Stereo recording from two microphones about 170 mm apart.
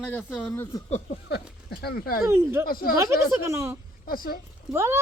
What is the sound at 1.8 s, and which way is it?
Speech, 65° left (ahead or behind).